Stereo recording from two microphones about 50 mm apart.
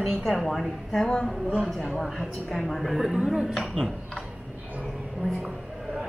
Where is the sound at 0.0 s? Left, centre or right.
Centre.